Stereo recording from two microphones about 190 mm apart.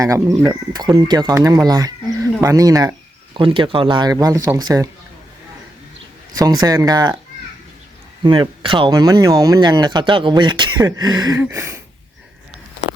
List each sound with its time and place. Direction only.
0.0 s speech: 15° right (ahead or behind)
6.4 s speech: 20° right (ahead or behind)
8.2 s speech: 25° right (ahead or behind)